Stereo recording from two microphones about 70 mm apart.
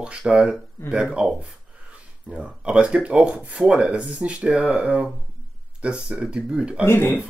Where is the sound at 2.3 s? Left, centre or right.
Centre.